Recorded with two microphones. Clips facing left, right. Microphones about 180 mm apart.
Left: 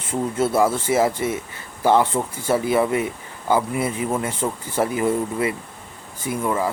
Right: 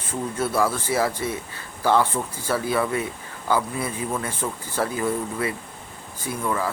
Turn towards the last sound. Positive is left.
turn(degrees=20)  # may be behind; listen again after turning